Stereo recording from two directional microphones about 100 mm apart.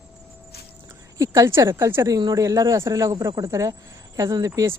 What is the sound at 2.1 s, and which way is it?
Speech, 40° right (ahead or behind).